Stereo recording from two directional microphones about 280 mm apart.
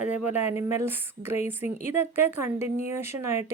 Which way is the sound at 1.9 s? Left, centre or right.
Centre.